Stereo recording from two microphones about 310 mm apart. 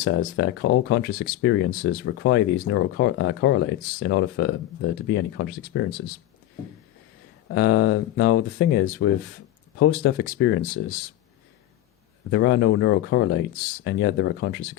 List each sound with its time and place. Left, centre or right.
0.0 s speech: left
7.5 s speech: left
12.3 s speech: left